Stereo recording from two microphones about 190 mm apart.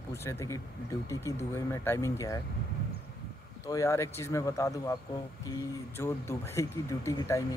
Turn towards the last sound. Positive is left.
turn(degrees=20)  # may be behind; listen again after turning